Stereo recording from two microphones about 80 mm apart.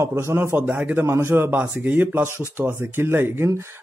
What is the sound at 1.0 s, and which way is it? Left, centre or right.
Speech, right.